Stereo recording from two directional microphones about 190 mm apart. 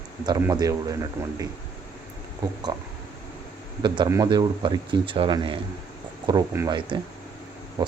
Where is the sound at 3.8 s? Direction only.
20° right (ahead or behind).